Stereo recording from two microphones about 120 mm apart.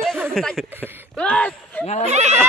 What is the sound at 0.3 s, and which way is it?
Speech, 5° left (ahead or behind).